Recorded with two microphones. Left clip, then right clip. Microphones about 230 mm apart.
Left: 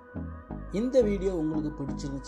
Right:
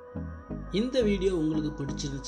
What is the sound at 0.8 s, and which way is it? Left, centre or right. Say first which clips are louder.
Speech: left 2 dB; left.